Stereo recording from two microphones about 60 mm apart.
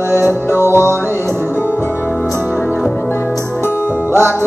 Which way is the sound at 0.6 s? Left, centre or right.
Right.